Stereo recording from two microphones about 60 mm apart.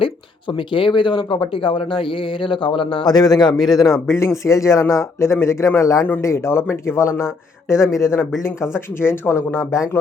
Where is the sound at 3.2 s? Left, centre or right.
Left.